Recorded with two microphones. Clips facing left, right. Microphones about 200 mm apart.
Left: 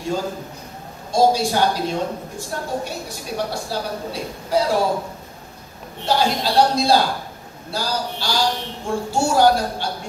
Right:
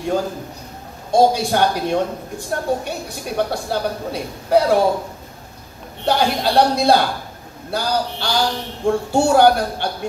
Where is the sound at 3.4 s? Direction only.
60° right (ahead or behind).